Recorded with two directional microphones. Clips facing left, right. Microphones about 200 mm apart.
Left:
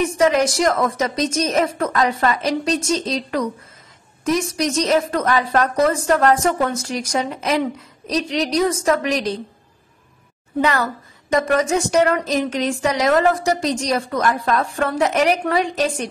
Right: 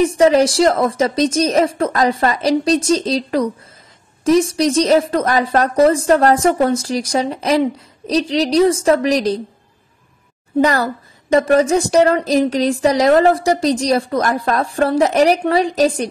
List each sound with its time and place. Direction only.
0.0 s a woman's voice: 35° right (ahead or behind)
10.6 s a woman's voice: 35° right (ahead or behind)